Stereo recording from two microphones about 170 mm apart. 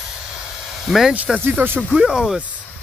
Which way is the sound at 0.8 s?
Centre (ahead or behind).